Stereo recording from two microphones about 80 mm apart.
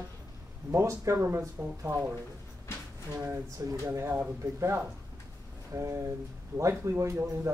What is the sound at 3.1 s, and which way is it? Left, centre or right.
Speech, right.